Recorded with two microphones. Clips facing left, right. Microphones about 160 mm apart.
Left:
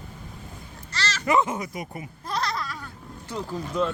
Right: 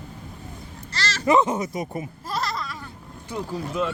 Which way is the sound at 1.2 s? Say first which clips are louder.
Right 4 dB; 20° right (ahead or behind).